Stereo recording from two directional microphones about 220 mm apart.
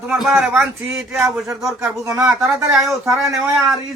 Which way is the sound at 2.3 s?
5° right (ahead or behind).